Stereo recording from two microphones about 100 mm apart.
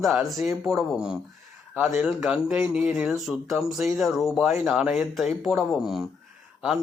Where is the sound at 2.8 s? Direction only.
20° right (ahead or behind).